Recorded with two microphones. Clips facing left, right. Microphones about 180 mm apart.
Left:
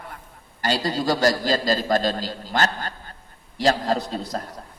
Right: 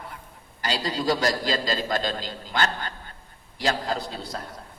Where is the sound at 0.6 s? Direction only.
50° left (ahead or behind).